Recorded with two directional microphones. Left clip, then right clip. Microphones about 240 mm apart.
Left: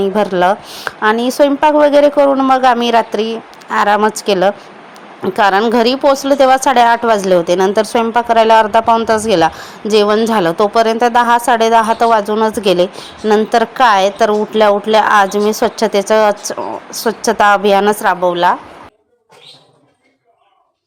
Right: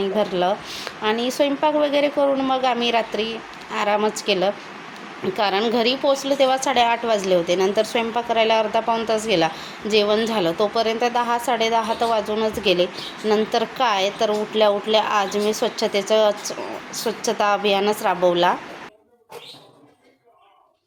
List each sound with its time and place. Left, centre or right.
0.0 s a woman's voice: left